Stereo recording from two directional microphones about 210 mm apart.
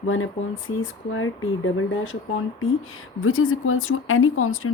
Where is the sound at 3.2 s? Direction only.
75° left (ahead or behind).